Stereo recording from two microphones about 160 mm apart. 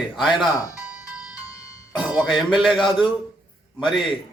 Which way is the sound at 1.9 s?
5° right (ahead or behind).